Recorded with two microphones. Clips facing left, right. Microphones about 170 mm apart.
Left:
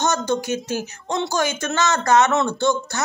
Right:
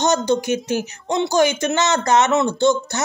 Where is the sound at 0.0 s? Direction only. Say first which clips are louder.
Right 4 dB; 15° right (ahead or behind).